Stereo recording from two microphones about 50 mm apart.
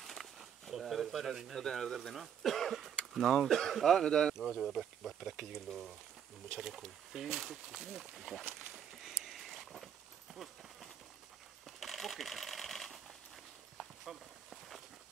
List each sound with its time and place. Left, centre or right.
0.0 s bird: centre
1.6 s speech: centre
4.4 s speech: centre
10.3 s a sound: centre
11.6 s sewing machine: centre
13.7 s walk: centre